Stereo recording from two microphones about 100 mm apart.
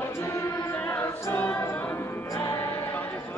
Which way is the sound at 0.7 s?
15° left (ahead or behind).